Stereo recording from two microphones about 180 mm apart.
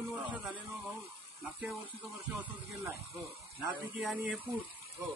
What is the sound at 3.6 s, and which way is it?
Speech, 10° right (ahead or behind).